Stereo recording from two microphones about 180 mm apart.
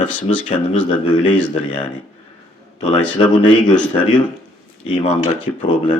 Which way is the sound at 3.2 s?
30° left (ahead or behind).